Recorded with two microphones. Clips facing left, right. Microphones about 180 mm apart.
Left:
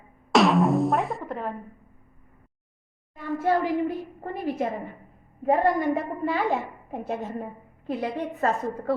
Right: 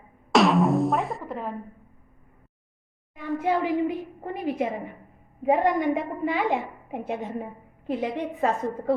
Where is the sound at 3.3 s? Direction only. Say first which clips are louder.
Left 1 dB; 15° right (ahead or behind).